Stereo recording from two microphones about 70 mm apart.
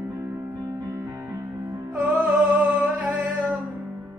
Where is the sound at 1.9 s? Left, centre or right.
Right.